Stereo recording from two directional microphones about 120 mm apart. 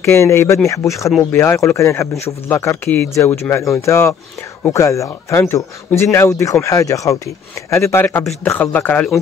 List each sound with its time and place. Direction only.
0.0 s speech: 20° left (ahead or behind)